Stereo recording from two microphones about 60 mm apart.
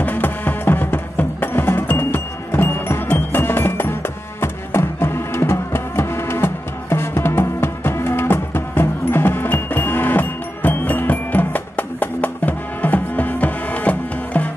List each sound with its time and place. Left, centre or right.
0.0 s music: left